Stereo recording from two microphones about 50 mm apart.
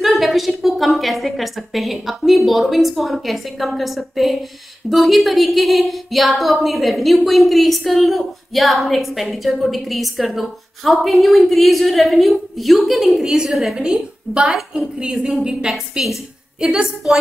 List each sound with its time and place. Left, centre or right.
0.0 s speech: centre
13.8 s a woman's voice: centre